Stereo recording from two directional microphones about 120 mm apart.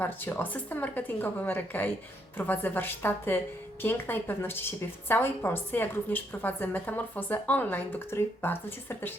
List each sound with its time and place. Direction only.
0.0 s a woman's voice: 15° left (ahead or behind)